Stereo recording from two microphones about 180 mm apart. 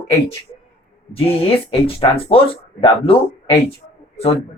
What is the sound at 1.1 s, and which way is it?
Speech, 30° left (ahead or behind).